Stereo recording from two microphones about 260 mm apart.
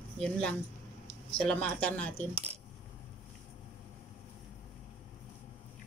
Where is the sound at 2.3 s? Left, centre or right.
Right.